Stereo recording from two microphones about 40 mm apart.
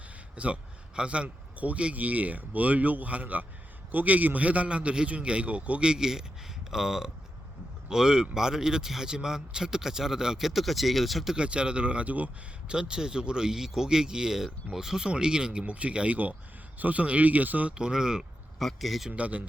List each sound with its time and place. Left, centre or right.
0.3 s a man's voice: right
5.9 s speech: centre
10.4 s speech: centre
11.3 s speech: right
12.6 s speech: right
16.7 s a man's voice: right
17.7 s speech: centre
18.6 s speech: centre
19.1 s a man's voice: right